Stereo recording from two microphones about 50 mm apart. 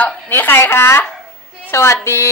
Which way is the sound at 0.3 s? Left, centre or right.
Left.